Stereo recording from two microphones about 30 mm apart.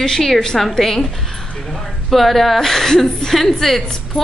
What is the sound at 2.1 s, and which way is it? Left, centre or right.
A woman's voice, centre.